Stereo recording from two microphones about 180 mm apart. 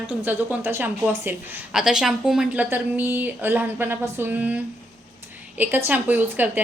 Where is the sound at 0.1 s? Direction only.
10° right (ahead or behind).